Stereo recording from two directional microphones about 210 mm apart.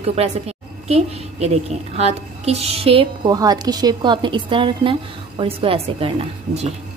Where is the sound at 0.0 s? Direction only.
30° right (ahead or behind).